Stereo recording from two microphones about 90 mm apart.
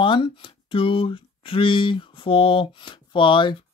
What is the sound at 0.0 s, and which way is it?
Speech, 75° left (ahead or behind).